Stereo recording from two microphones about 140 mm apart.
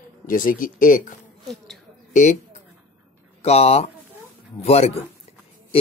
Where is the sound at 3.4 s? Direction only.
50° left (ahead or behind).